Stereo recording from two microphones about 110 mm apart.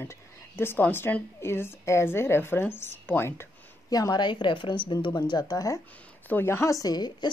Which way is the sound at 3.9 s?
35° left (ahead or behind).